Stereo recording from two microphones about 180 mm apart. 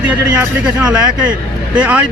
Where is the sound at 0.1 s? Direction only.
5° right (ahead or behind).